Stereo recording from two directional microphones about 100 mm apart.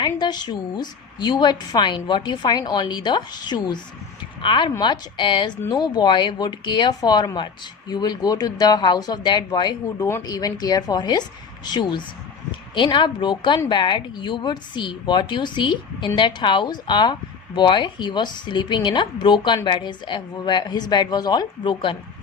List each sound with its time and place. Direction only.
0.0 s a woman's voice: 45° left (ahead or behind)